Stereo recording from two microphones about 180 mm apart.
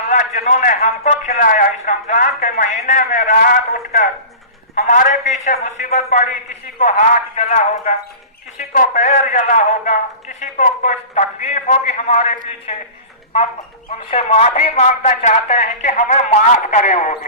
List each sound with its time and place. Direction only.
0.1 s a man's voice: 40° left (ahead or behind)
8.5 s a man's voice: 50° left (ahead or behind)
14.1 s a man's voice: 35° left (ahead or behind)